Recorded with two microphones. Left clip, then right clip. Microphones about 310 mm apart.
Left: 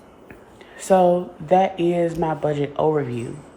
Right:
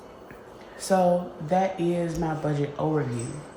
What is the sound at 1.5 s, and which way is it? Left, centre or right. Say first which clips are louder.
Speech: left 7 dB; left.